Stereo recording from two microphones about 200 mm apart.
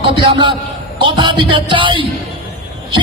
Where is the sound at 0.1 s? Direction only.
25° right (ahead or behind).